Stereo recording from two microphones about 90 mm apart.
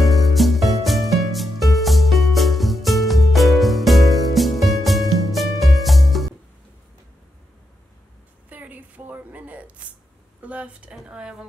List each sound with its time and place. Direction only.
0.0 s music: centre (ahead or behind)
8.5 s a sound: 20° right (ahead or behind)
11.0 s dishes: 10° right (ahead or behind)